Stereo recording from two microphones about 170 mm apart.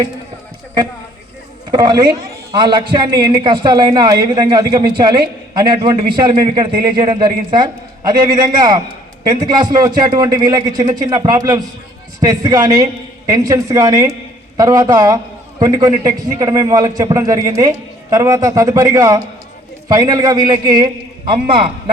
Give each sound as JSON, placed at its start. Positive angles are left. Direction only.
{"t": 1.7, "sound": "a man's voice", "side_deg": -25}